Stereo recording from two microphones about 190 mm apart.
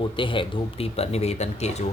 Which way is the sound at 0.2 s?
25° left (ahead or behind).